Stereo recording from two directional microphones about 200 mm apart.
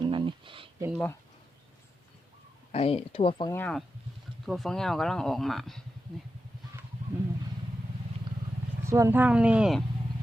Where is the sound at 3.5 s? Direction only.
5° left (ahead or behind).